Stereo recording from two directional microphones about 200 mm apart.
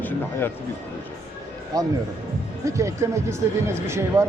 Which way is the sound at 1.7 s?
20° right (ahead or behind).